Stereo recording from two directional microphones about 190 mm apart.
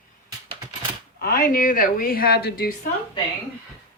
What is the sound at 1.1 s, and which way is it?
Speech, 55° left (ahead or behind).